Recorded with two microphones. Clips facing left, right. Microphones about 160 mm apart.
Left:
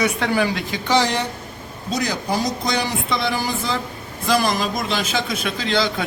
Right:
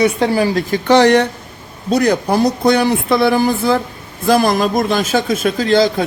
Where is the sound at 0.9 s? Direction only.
60° right (ahead or behind).